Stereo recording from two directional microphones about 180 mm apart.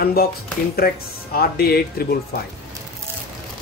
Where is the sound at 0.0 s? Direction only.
60° left (ahead or behind).